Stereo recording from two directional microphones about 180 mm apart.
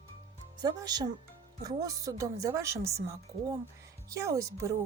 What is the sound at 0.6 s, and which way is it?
A woman's voice, 20° right (ahead or behind).